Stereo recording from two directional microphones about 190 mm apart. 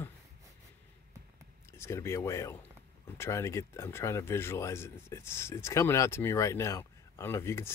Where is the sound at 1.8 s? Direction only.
15° left (ahead or behind).